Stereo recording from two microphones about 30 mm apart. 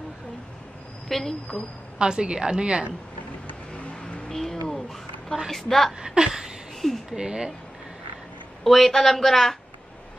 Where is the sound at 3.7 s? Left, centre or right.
Left.